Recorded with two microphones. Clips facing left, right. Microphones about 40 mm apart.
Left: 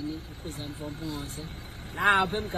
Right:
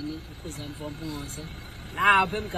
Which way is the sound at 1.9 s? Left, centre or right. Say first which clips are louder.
Right 3 dB; right.